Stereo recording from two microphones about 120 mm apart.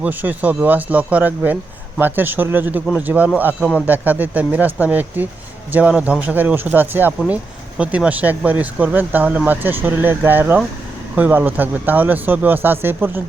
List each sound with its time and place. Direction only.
0.0 s speech: 15° right (ahead or behind)